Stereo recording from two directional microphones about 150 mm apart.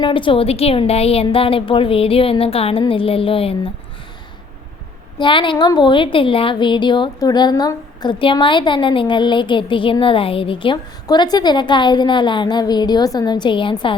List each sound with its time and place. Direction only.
0.0 s a woman's voice: 35° left (ahead or behind)
5.1 s a woman's voice: 30° left (ahead or behind)